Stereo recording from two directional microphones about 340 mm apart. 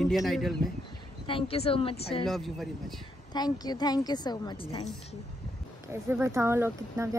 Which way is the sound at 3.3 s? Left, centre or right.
Centre.